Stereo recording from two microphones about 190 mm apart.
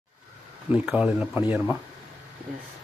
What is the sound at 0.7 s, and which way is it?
Speech, 5° right (ahead or behind).